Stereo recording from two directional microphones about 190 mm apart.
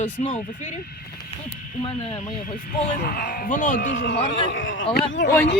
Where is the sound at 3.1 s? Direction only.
55° left (ahead or behind).